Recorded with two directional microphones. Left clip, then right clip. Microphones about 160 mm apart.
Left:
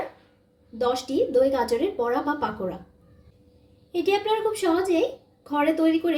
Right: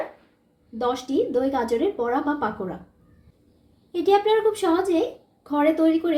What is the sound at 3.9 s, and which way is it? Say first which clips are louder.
A woman's voice: right 4 dB; 25° right (ahead or behind).